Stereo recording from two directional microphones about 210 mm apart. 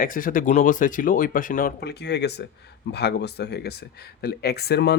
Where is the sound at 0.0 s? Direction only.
40° left (ahead or behind).